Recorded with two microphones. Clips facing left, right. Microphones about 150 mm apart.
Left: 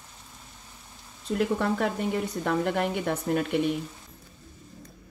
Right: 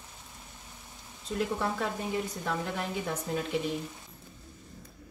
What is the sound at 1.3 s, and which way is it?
Speech, 65° left (ahead or behind).